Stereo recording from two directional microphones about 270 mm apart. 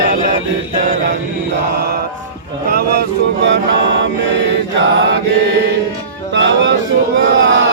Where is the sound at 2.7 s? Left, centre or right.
Right.